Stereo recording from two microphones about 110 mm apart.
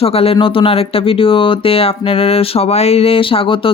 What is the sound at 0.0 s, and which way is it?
Speech, 65° left (ahead or behind).